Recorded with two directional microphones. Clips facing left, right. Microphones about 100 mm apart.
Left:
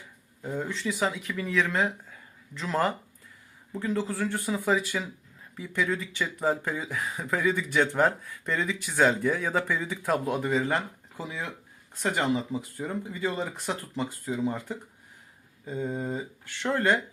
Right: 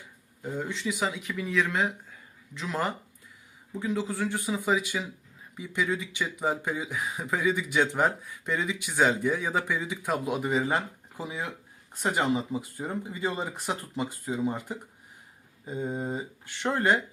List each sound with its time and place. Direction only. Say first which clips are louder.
0.4 s speech: left 1 dB; centre (ahead or behind)